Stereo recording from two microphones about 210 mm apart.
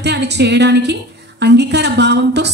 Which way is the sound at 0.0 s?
55° right (ahead or behind).